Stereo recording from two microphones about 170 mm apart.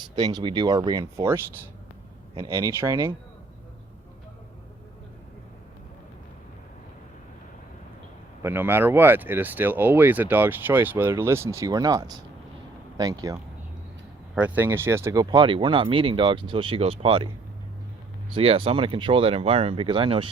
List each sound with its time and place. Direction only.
0.2 s speech: 25° right (ahead or behind)
8.4 s speech: 15° right (ahead or behind)
14.3 s speech: 10° right (ahead or behind); by 17.2 s 35° right (ahead or behind)
18.3 s speech: 30° right (ahead or behind)